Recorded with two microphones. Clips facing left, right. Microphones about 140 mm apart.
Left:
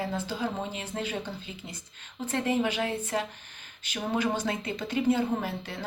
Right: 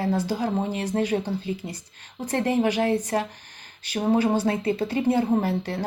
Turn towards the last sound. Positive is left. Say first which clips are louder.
# right 9 dB
turn(degrees=-40)  # may be behind; listen again after turning